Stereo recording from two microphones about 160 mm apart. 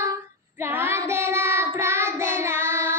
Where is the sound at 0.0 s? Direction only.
15° right (ahead or behind).